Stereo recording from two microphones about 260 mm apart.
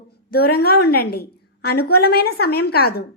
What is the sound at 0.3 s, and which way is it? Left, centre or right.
A woman's voice, left.